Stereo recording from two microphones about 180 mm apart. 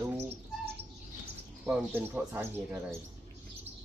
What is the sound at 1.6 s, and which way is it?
Speech, 10° right (ahead or behind).